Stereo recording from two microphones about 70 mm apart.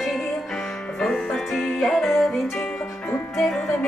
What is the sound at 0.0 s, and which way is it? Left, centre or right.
Music, centre.